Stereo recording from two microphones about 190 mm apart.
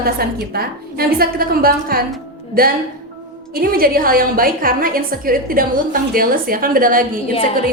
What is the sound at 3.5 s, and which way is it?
A woman's voice, 50° right (ahead or behind).